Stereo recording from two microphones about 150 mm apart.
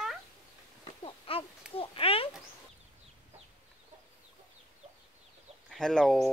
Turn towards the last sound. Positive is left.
turn(degrees=5)  # may be behind; listen again after turning